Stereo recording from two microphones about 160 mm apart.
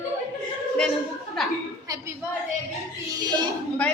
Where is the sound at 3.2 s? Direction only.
25° right (ahead or behind).